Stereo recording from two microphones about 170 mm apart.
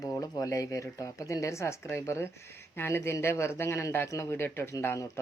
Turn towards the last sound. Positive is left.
turn(degrees=15)  # may be behind; listen again after turning